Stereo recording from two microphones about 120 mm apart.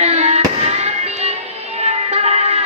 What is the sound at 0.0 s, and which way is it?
Fireworks, 70° right (ahead or behind).